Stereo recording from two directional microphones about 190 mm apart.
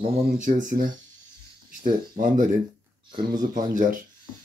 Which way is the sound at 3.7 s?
45° right (ahead or behind).